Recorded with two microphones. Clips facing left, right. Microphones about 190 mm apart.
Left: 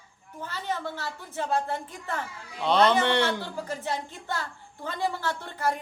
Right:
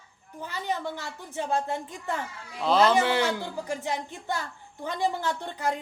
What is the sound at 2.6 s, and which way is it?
A man's voice, centre (ahead or behind).